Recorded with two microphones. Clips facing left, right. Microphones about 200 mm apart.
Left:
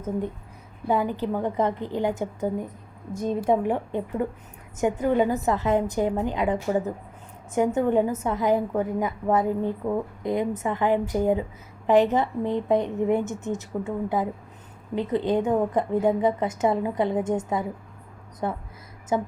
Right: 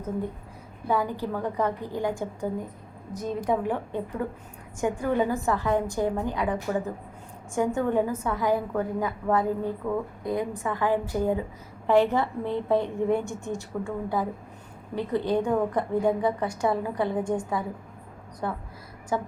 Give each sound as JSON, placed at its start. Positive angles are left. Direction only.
{"t": 0.9, "sound": "a woman's voice", "side_deg": 20}